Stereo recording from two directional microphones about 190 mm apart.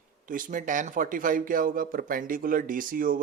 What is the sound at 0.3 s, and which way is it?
Speech, 45° right (ahead or behind).